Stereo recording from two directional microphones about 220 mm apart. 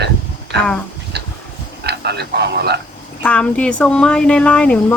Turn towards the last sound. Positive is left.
turn(degrees=5)  # may be behind; listen again after turning